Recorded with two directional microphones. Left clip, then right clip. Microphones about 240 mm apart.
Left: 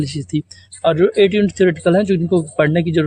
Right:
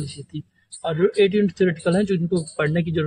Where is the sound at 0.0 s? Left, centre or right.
Left.